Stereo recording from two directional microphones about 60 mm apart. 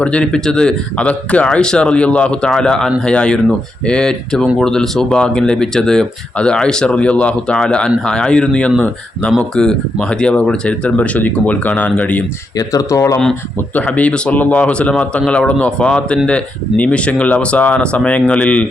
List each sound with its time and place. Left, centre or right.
0.0 s speech: centre
12.5 s speech: left
13.7 s speech: left